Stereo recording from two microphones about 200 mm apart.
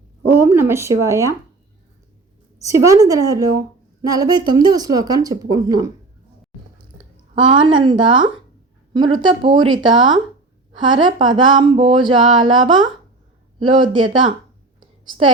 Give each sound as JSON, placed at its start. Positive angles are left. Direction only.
{"t": 0.3, "sound": "speech", "side_deg": -10}
{"t": 2.6, "sound": "speech", "side_deg": -15}
{"t": 7.3, "sound": "a woman's voice", "side_deg": -25}
{"t": 14.8, "sound": "a sound", "side_deg": -25}